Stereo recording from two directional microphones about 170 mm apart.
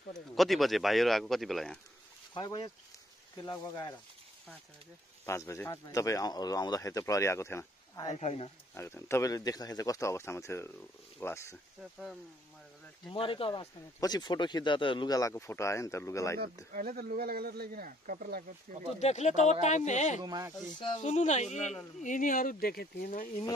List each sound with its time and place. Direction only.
0.4 s speech: centre (ahead or behind)
2.3 s speech: 25° left (ahead or behind)
5.2 s speech: 15° left (ahead or behind)
8.1 s speech: 40° left (ahead or behind)
8.7 s speech: 15° left (ahead or behind)
13.1 s speech: 30° left (ahead or behind)
16.7 s speech: 60° right (ahead or behind)
18.9 s speech: 40° left (ahead or behind)
20.2 s speech: 25° right (ahead or behind)
21.0 s speech: 45° left (ahead or behind)